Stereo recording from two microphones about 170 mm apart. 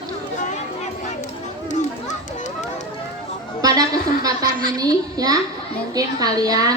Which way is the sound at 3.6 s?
20° right (ahead or behind).